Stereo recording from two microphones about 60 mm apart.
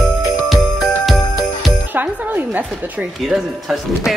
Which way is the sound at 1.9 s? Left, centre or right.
Right.